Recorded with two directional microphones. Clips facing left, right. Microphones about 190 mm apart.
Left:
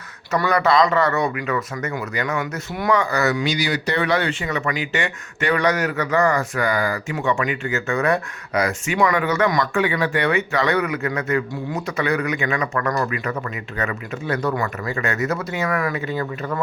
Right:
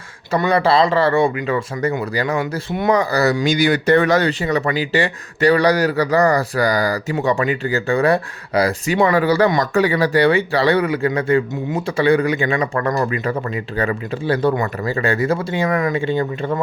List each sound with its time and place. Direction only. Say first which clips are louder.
0.3 s speech: right 3 dB; 25° right (ahead or behind)
3.5 s speech: right 8 dB; 50° right (ahead or behind); by 16.6 s 25° right (ahead or behind)